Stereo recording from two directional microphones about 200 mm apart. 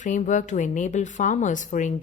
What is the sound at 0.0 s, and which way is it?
A woman's voice, 40° left (ahead or behind).